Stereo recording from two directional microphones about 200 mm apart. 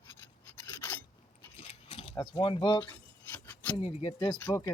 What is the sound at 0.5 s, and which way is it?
Filing, 15° left (ahead or behind).